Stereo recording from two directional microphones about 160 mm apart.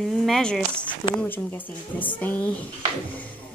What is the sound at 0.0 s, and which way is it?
Speech, centre (ahead or behind).